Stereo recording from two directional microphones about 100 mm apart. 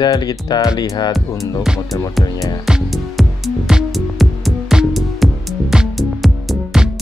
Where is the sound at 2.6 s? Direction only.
Centre (ahead or behind).